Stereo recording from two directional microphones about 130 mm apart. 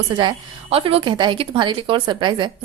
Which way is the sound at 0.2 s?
40° right (ahead or behind).